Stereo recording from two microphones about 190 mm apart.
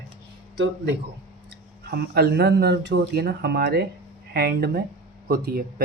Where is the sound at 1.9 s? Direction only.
55° right (ahead or behind).